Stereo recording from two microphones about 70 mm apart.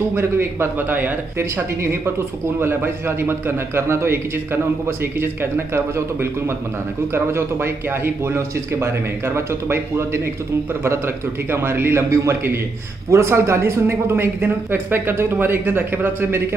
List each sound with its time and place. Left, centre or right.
0.1 s a man's voice: right
1.4 s a man's voice: right